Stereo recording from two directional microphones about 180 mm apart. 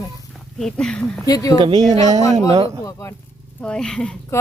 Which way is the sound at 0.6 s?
5° left (ahead or behind).